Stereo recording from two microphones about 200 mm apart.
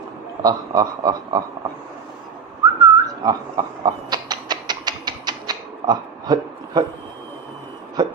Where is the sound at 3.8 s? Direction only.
20° right (ahead or behind).